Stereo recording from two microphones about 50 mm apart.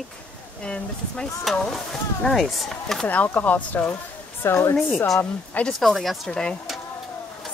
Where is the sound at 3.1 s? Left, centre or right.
Left.